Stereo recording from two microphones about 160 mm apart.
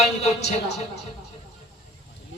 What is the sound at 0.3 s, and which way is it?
Speech, 45° left (ahead or behind).